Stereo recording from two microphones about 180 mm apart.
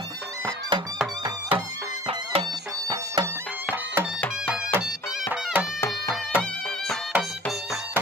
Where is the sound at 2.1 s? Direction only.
30° right (ahead or behind).